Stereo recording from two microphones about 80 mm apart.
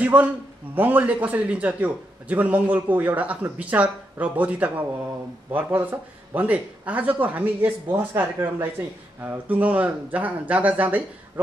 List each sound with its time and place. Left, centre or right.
0.0 s a man's voice: right